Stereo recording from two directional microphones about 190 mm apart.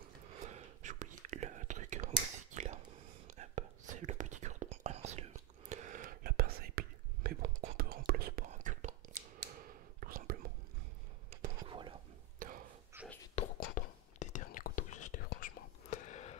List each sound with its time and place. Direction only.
0.4 s whispering: 40° right (ahead or behind); by 8.5 s 55° right (ahead or behind)
8.5 s whispering: 40° right (ahead or behind)
11.4 s whispering: 25° right (ahead or behind)
12.4 s a sound: 45° right (ahead or behind)
12.9 s whispering: 10° right (ahead or behind)
13.3 s whispering: 35° left (ahead or behind)
15.9 s a sound: 40° left (ahead or behind)